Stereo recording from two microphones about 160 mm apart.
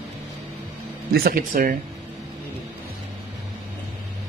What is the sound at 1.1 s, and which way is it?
Speech, 70° right (ahead or behind).